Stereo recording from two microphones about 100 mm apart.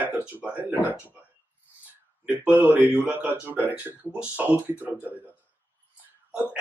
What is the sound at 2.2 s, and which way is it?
Speech, 15° right (ahead or behind).